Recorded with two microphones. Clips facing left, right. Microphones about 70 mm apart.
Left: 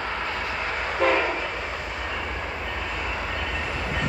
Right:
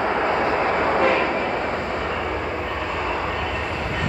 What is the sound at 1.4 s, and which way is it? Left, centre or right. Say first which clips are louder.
Train: right 7 dB; right.